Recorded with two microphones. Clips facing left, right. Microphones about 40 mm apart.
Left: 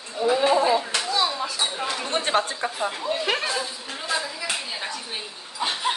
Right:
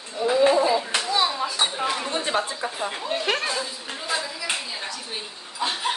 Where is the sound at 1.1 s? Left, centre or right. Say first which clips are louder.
Right 2 dB; centre.